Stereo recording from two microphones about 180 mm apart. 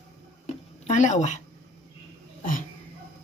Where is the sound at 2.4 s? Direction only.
50° left (ahead or behind).